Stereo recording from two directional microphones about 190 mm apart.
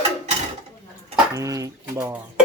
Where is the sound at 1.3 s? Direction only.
15° right (ahead or behind).